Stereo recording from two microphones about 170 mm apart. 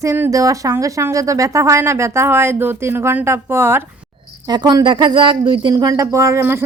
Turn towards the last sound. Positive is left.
turn(degrees=-15)  # may be behind; listen again after turning